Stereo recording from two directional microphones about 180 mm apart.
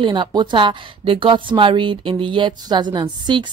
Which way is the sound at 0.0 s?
25° right (ahead or behind).